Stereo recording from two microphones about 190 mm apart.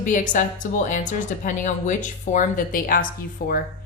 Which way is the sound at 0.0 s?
40° left (ahead or behind).